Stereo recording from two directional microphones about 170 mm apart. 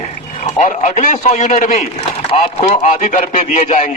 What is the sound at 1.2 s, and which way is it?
Speech, 45° left (ahead or behind).